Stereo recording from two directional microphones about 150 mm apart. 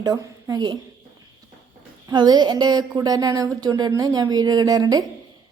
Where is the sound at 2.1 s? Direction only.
25° right (ahead or behind).